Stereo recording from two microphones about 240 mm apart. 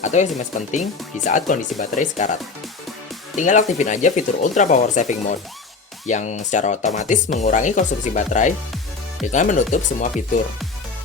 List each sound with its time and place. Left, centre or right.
0.0 s speech: left
3.3 s speech: left